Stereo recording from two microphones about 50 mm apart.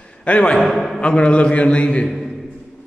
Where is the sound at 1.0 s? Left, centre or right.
Left.